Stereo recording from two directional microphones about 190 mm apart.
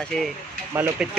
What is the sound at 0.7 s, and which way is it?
Speech, 10° right (ahead or behind).